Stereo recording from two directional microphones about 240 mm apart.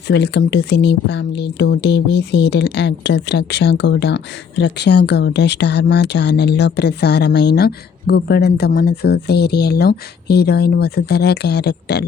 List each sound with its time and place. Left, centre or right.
0.1 s speech: left